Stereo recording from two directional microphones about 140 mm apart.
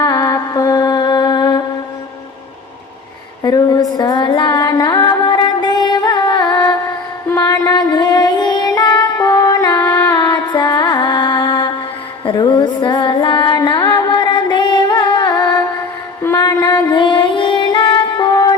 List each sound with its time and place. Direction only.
0.0 s music: 25° left (ahead or behind)
3.4 s music: 25° left (ahead or behind)
10.3 s music: 30° left (ahead or behind)
16.2 s a sound: 20° left (ahead or behind)
16.9 s music: 35° left (ahead or behind)